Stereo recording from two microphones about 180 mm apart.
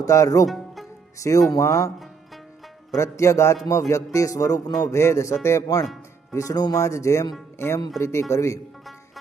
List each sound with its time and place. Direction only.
0.0 s speech: 20° left (ahead or behind)
0.4 s music: centre (ahead or behind)
1.5 s speech: 20° left (ahead or behind)
2.9 s speech: 15° left (ahead or behind)